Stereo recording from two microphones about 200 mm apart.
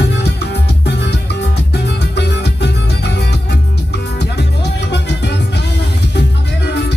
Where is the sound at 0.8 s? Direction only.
55° left (ahead or behind).